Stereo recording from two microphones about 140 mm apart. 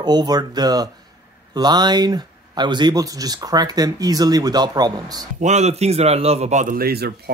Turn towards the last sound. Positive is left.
turn(degrees=-80)